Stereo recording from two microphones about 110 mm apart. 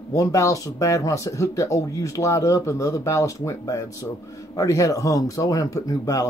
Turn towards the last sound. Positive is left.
turn(degrees=30)  # may be behind; listen again after turning